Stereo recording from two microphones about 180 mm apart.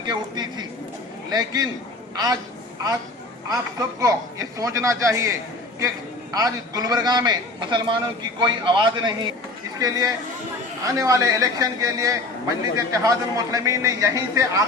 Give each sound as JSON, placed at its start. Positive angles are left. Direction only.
{"t": 0.1, "sound": "a man's voice", "side_deg": -25}
{"t": 3.5, "sound": "speech", "side_deg": -20}
{"t": 6.3, "sound": "a man's voice", "side_deg": -20}